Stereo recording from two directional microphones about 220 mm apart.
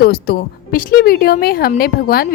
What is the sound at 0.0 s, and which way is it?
Speech, 45° left (ahead or behind).